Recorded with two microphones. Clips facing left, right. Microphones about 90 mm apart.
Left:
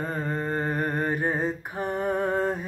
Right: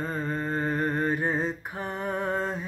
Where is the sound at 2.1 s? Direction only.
50° left (ahead or behind).